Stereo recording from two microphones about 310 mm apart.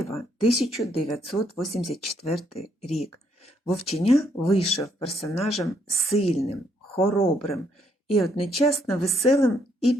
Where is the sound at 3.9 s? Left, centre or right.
Centre.